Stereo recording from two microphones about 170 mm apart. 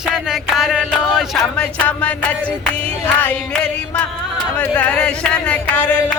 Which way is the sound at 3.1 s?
5° left (ahead or behind).